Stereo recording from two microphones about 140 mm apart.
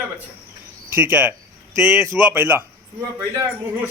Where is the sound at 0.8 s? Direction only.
15° right (ahead or behind).